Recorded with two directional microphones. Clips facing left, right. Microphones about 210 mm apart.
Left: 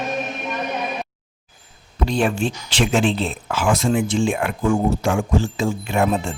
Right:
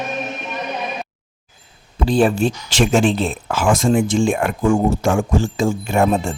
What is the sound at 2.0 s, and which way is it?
Speech, 35° right (ahead or behind).